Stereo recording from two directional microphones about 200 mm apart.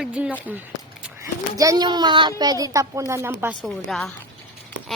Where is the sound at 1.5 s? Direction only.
15° right (ahead or behind).